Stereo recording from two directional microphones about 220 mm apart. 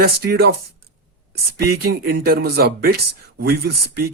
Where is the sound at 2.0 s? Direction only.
45° right (ahead or behind).